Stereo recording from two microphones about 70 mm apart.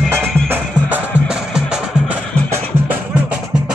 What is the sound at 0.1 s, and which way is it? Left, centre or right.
Music, right.